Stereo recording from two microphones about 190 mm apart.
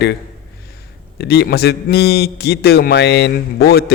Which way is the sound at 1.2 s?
60° left (ahead or behind).